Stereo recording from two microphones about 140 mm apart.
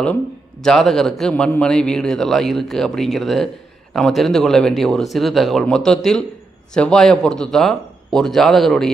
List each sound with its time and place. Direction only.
0.0 s a man's voice: 5° left (ahead or behind)